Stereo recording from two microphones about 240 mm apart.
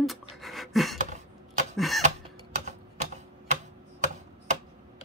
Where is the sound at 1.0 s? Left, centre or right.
Right.